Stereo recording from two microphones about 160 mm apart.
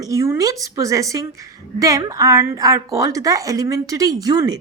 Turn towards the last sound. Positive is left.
turn(degrees=-25)  # may be behind; listen again after turning